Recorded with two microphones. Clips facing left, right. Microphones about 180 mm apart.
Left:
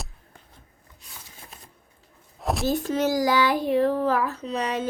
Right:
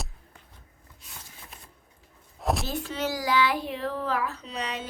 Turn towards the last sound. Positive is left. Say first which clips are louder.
# left 7 dB
turn(degrees=45)  # may be behind; listen again after turning